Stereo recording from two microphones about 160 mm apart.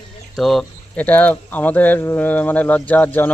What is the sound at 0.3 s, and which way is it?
Speech, centre (ahead or behind).